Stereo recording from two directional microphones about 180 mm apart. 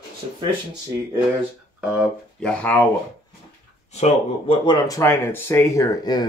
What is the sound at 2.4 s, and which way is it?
Speech, 5° left (ahead or behind).